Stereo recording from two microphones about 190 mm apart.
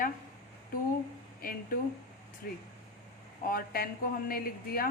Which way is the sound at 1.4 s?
50° left (ahead or behind).